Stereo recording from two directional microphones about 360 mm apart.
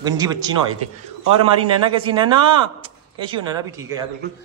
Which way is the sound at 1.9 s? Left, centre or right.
Centre.